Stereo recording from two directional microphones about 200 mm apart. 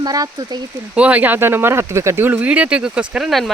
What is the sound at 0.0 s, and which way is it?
Speech, 20° right (ahead or behind).